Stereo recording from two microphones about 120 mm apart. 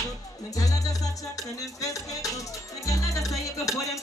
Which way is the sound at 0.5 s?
30° left (ahead or behind).